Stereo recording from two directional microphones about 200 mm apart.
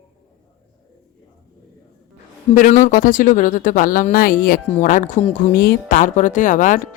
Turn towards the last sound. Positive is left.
turn(degrees=40)  # may be behind; listen again after turning